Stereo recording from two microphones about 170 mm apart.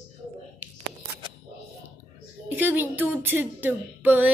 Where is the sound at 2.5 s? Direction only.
10° right (ahead or behind).